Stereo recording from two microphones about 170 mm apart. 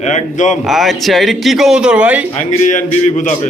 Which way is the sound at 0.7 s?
Centre (ahead or behind).